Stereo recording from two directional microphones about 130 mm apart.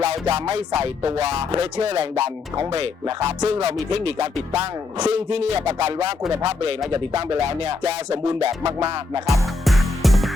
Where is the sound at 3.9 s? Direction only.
55° right (ahead or behind).